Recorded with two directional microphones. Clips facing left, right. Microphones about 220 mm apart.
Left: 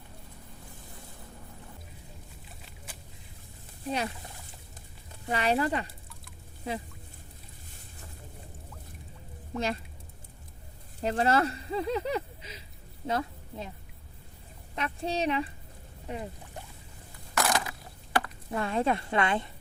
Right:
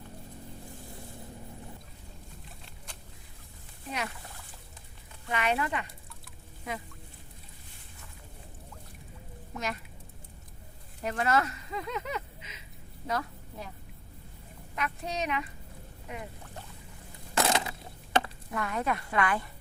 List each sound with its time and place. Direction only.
2.6 s boat: 5° left (ahead or behind)
5.3 s speech: 35° left (ahead or behind)
9.6 s speech: 30° left (ahead or behind)
11.0 s a woman's voice: 30° left (ahead or behind)
14.8 s speech: 30° left (ahead or behind)
17.3 s crushing: 25° right (ahead or behind)
18.5 s speech: 30° left (ahead or behind)